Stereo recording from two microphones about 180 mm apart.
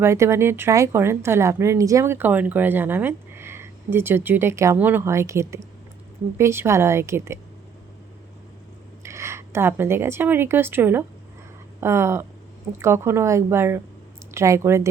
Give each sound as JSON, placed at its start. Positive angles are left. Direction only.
{"t": 0.0, "sound": "speech", "side_deg": -15}
{"t": 9.0, "sound": "a woman's voice", "side_deg": -15}